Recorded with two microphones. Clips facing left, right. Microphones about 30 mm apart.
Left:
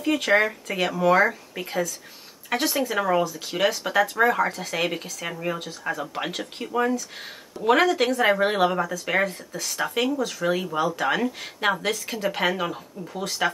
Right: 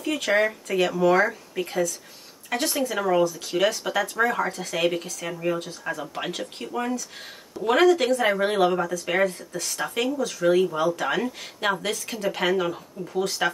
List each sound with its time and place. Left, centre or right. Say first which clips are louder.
0.1 s speech: left 2 dB; centre